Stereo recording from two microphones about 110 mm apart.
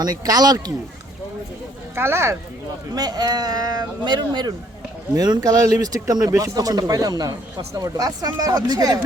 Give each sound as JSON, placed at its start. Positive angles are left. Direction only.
{"t": 0.0, "sound": "speech", "side_deg": -35}
{"t": 2.0, "sound": "speech", "side_deg": -25}
{"t": 2.9, "sound": "speech", "side_deg": -35}